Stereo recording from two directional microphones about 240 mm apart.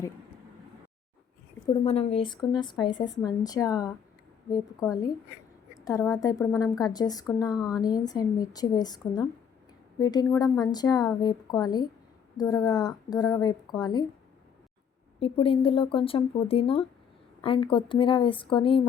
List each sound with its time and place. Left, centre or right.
1.8 s a woman's voice: left
15.2 s speech: left